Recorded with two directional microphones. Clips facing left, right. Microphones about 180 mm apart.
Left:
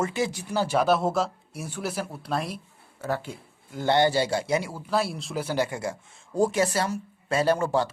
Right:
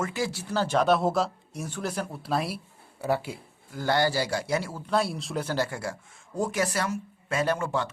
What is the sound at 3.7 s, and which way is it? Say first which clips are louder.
A man's voice: left 3 dB; 20° left (ahead or behind).